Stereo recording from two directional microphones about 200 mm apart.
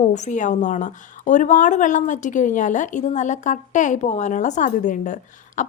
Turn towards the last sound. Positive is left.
turn(degrees=40)  # may be behind; listen again after turning